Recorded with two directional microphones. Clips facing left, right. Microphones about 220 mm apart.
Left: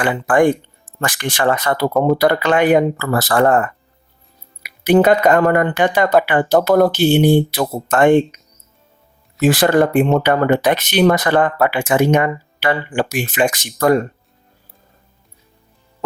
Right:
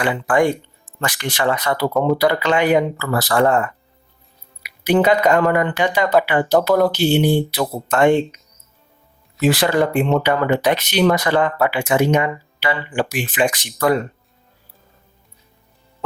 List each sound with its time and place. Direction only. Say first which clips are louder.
0.0 s speech: left 3 dB; 50° left (ahead or behind)
4.6 s speech: left 4 dB; 45° left (ahead or behind)
9.4 s speech: left 3 dB; 45° left (ahead or behind)